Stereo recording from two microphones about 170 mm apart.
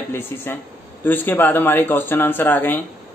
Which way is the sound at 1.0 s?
10° left (ahead or behind).